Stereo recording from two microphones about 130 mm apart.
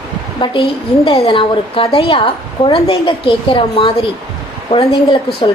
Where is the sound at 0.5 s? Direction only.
45° left (ahead or behind).